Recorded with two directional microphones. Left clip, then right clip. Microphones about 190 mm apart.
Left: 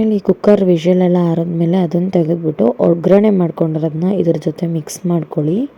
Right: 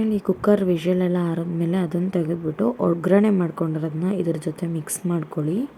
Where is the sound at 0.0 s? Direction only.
15° left (ahead or behind).